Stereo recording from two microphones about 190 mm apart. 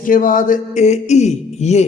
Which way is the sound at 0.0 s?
45° left (ahead or behind).